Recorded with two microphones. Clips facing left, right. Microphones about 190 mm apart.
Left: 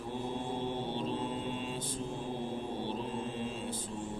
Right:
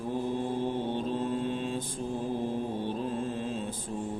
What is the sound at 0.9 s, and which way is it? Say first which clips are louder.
Mantra: right 5 dB; 45° right (ahead or behind).